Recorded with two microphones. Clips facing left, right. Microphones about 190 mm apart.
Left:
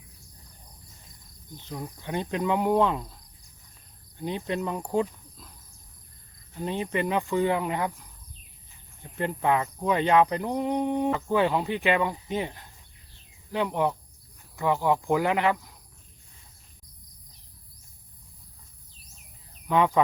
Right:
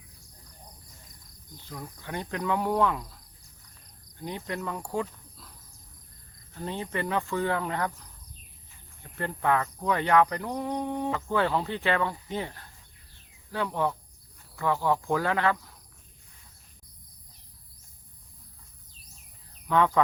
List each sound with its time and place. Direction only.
1.5 s speech: 20° left (ahead or behind)
4.2 s speech: 20° left (ahead or behind)
6.5 s speech: 15° left (ahead or behind)
9.0 s speech: 20° left (ahead or behind)
19.6 s speech: 15° left (ahead or behind)